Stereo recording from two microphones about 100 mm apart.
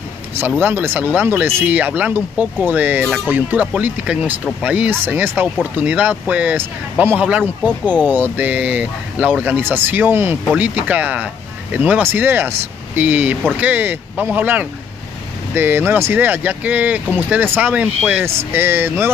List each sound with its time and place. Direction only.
0.6 s speech: 20° right (ahead or behind)
18.2 s speech: 25° right (ahead or behind)